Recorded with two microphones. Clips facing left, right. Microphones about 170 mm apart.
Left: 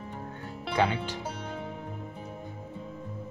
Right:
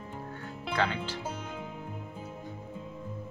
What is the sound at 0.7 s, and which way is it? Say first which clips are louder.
Speech: left 4 dB; 15° left (ahead or behind).